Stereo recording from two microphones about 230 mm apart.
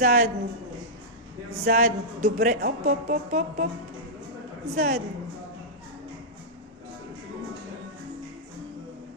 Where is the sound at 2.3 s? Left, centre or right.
Right.